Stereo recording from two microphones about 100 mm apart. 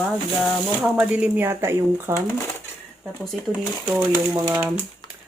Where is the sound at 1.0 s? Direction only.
10° right (ahead or behind).